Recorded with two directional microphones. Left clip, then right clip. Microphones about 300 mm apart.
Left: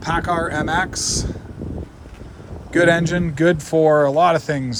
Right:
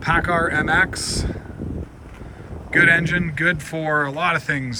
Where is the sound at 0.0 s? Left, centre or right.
Centre.